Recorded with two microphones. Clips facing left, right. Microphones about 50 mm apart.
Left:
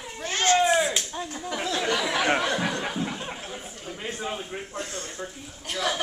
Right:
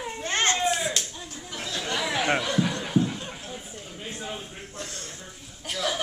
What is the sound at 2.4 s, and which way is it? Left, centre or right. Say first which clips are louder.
Snicker: left 1 dB; left.